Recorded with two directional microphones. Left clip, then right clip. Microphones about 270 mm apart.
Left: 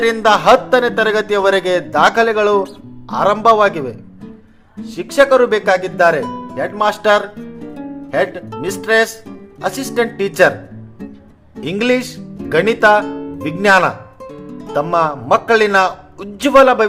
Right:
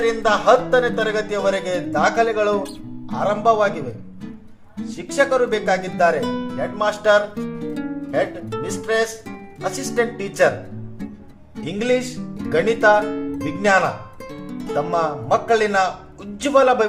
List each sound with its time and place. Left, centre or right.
0.0 s speech: centre
4.9 s speech: left
8.6 s a man's voice: centre
11.6 s a man's voice: centre